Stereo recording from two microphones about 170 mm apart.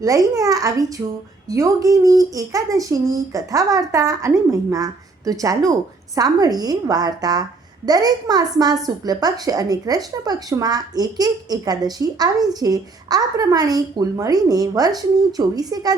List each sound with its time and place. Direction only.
0.0 s a woman's voice: 20° right (ahead or behind)